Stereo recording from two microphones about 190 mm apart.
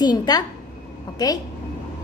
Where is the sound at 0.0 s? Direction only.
20° left (ahead or behind).